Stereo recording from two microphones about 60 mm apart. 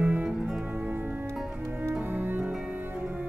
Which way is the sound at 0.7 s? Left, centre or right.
Right.